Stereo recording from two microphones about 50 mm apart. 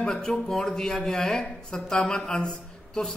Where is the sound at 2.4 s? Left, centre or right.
Centre.